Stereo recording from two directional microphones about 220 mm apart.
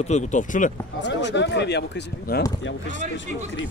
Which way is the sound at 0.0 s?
30° left (ahead or behind).